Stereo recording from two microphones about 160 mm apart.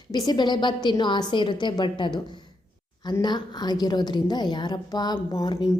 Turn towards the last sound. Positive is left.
turn(degrees=25)  # may be behind; listen again after turning